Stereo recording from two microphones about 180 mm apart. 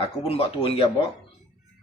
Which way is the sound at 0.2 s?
35° left (ahead or behind).